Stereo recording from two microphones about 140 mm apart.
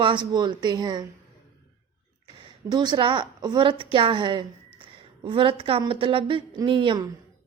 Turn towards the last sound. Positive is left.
turn(degrees=-35)  # may be behind; listen again after turning